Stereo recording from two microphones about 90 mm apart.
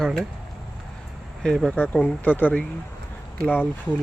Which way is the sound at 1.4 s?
5° left (ahead or behind).